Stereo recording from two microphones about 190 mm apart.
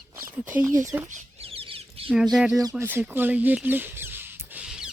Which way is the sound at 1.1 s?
30° right (ahead or behind).